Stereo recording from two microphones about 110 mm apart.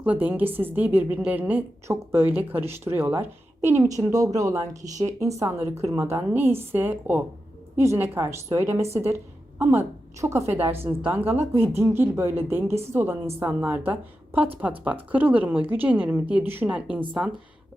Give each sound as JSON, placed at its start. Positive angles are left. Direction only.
{"t": 0.0, "sound": "a woman's voice", "side_deg": -15}